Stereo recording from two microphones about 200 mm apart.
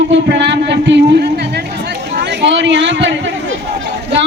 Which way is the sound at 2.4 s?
60° right (ahead or behind).